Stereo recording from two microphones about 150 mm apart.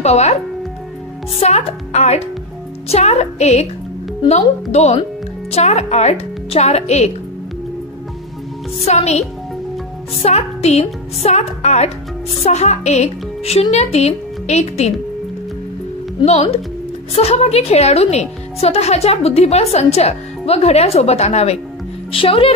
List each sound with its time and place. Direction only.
0.0 s a woman's voice: 45° left (ahead or behind)
1.4 s a woman's voice: 45° left (ahead or behind)
8.8 s a woman's voice: 45° left (ahead or behind)
16.3 s a woman's voice: 45° left (ahead or behind)